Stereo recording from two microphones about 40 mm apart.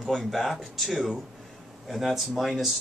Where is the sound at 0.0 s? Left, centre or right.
Centre.